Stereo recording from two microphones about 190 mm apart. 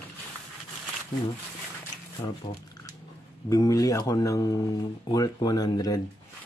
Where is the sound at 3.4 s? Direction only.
20° left (ahead or behind).